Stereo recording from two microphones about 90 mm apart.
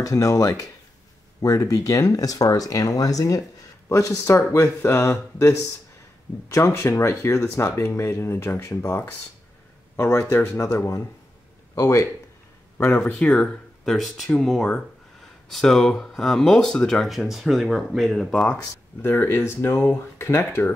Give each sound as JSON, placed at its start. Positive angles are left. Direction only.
{"t": 0.0, "sound": "speech", "side_deg": 40}
{"t": 12.7, "sound": "speech", "side_deg": 20}
{"t": 18.6, "sound": "speech", "side_deg": 25}